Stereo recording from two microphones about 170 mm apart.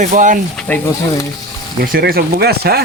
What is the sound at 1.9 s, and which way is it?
Speech, 65° right (ahead or behind).